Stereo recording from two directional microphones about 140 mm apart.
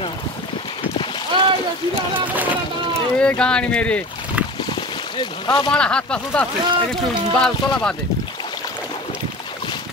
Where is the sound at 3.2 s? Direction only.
5° left (ahead or behind).